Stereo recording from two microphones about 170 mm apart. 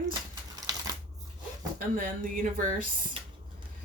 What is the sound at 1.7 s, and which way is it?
Speech, 55° right (ahead or behind).